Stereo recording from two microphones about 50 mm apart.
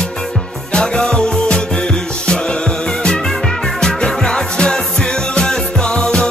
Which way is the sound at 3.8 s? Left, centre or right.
Centre.